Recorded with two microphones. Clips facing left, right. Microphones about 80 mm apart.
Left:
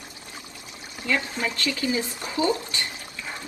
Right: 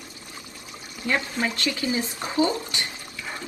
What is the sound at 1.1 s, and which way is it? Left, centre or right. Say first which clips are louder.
Speech: right 1 dB; right.